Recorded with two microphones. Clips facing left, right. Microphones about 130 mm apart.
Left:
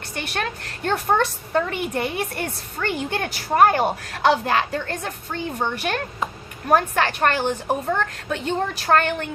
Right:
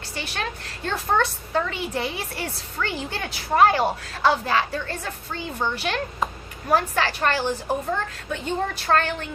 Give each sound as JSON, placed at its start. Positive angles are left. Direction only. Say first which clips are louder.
{"t": 0.2, "sound": "a woman's voice", "louder": "left 3 dB", "side_deg": 60}
{"t": 4.1, "sound": "a woman's voice", "louder": "left 3 dB", "side_deg": 65}